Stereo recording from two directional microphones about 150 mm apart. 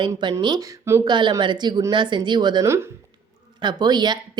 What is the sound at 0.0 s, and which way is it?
A woman's voice, 30° right (ahead or behind).